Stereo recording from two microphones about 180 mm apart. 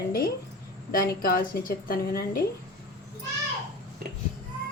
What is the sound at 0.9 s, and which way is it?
A woman's voice, 55° left (ahead or behind).